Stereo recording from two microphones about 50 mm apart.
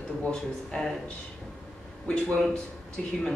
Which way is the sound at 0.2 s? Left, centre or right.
Centre.